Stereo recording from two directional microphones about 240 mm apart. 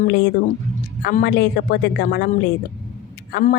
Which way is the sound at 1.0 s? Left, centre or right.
Left.